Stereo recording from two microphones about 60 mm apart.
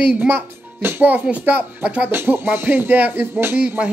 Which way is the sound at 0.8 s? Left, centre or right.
Right.